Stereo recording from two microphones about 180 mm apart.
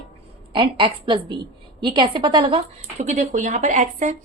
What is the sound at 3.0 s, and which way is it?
Speech, 40° right (ahead or behind).